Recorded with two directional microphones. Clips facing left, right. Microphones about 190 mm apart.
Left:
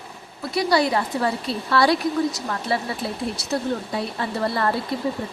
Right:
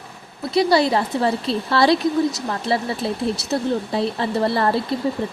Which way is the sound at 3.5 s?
30° right (ahead or behind).